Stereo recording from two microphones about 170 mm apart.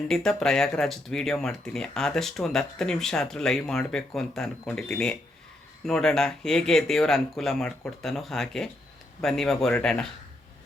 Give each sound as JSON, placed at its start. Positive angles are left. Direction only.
{"t": 0.1, "sound": "speech", "side_deg": 5}